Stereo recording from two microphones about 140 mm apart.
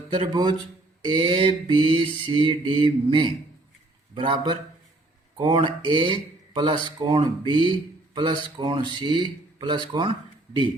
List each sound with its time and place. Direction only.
0.1 s speech: 35° right (ahead or behind)